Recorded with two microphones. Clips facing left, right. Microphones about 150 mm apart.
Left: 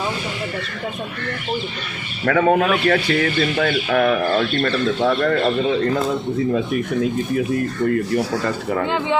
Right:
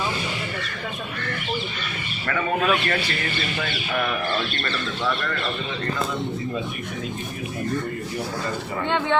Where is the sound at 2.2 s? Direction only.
85° left; by 4.2 s 65° left (ahead or behind).